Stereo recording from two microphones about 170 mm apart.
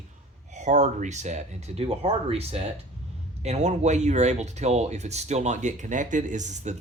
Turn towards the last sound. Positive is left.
turn(degrees=-45)  # may be behind; listen again after turning